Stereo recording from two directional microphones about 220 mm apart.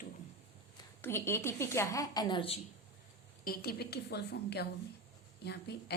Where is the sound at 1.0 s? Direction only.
10° left (ahead or behind).